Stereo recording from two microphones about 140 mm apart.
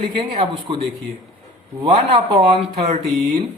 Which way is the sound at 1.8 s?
35° right (ahead or behind).